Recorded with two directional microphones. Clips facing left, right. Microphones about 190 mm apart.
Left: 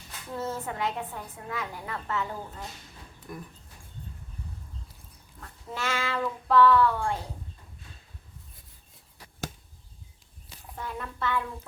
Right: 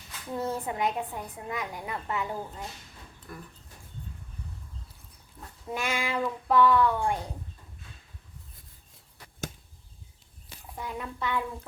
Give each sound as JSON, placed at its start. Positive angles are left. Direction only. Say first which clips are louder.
{"t": 0.3, "sound": "a woman's voice", "louder": "right 2 dB", "side_deg": -15}
{"t": 3.3, "sound": "speech", "louder": "left 3 dB", "side_deg": 15}
{"t": 5.4, "sound": "a woman's voice", "louder": "right 2 dB", "side_deg": -15}
{"t": 10.8, "sound": "a woman's voice", "louder": "even", "side_deg": -10}